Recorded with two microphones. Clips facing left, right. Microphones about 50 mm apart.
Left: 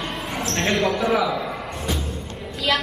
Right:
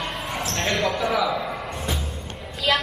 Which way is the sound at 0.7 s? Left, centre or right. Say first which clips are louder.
Left 2 dB; centre.